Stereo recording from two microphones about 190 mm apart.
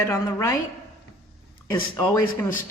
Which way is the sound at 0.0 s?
15° left (ahead or behind).